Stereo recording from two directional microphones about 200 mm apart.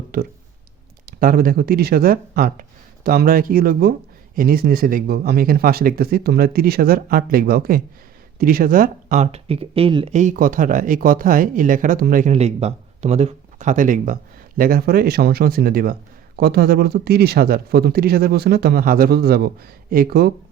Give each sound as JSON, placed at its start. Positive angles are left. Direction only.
{"t": 0.1, "sound": "a man's voice", "side_deg": -50}